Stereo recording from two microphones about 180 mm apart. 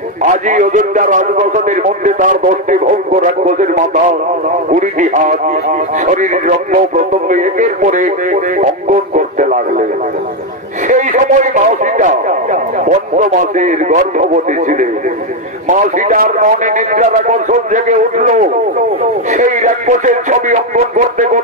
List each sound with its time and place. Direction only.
0.2 s a man's voice: 45° right (ahead or behind)
6.3 s a man's voice: 45° right (ahead or behind)
10.9 s a man's voice: 45° right (ahead or behind)